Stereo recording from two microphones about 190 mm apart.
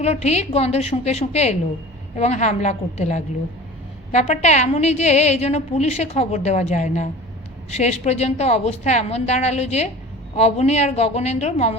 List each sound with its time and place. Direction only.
0.0 s a woman's voice: 35° left (ahead or behind)